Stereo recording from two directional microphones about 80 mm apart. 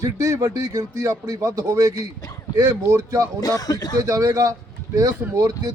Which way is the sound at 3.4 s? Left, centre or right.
Left.